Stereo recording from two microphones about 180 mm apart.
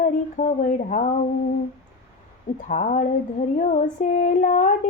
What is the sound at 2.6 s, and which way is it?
Female singing, 45° left (ahead or behind).